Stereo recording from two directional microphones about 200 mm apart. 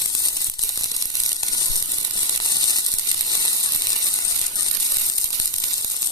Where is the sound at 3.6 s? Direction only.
20° left (ahead or behind).